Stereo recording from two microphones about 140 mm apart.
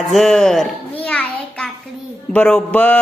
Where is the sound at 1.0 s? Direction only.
10° left (ahead or behind).